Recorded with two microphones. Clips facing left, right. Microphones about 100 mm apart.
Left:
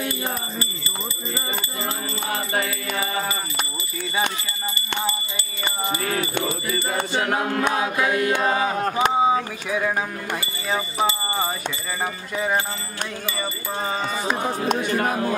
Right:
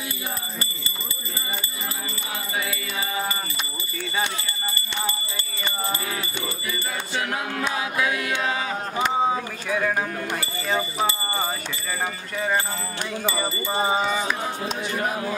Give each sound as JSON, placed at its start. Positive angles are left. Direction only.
{"t": 6.0, "sound": "music", "side_deg": 50}
{"t": 8.1, "sound": "mantra", "side_deg": 40}
{"t": 8.9, "sound": "speech", "side_deg": 10}
{"t": 11.0, "sound": "a sound", "side_deg": 15}
{"t": 12.4, "sound": "speech", "side_deg": 10}
{"t": 13.4, "sound": "speech", "side_deg": -15}
{"t": 14.4, "sound": "speech", "side_deg": 55}